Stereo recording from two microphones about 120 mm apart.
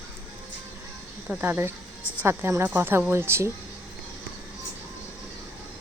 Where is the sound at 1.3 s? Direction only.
15° right (ahead or behind).